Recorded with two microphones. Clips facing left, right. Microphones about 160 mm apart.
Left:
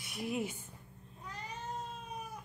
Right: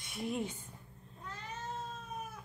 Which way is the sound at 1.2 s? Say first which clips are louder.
Even; 15° left (ahead or behind).